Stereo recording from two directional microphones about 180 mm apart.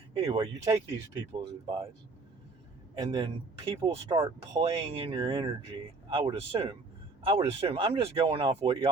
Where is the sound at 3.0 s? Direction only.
25° right (ahead or behind).